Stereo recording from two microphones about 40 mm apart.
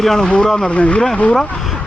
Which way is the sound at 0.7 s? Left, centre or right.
Left.